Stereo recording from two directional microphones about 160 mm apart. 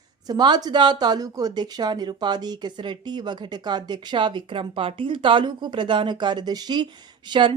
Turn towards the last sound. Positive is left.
turn(degrees=-30)  # may be behind; listen again after turning